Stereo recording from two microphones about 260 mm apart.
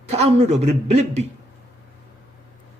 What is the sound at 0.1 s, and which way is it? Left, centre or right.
A man's voice, right.